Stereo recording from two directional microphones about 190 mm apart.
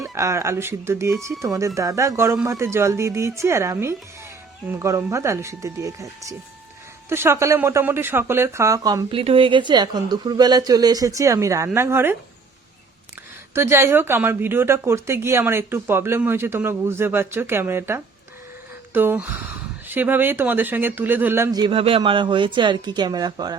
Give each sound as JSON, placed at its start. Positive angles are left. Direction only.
{"t": 0.0, "sound": "speech", "side_deg": -15}
{"t": 13.5, "sound": "speech", "side_deg": -15}